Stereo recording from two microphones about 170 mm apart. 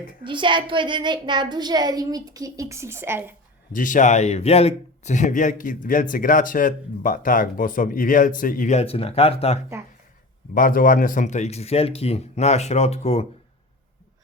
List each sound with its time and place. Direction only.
0.3 s a woman's voice: 30° right (ahead or behind); by 3.3 s 15° right (ahead or behind)
3.7 s speech: 50° left (ahead or behind); by 9.6 s 35° left (ahead or behind)
10.5 s a man's voice: 55° left (ahead or behind); by 13.2 s 40° left (ahead or behind)